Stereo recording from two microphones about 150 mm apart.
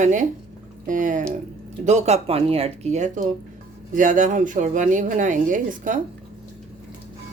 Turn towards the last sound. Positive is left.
turn(degrees=-60)  # may be behind; listen again after turning